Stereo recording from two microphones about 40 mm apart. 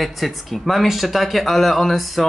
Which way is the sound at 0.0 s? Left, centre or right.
Centre.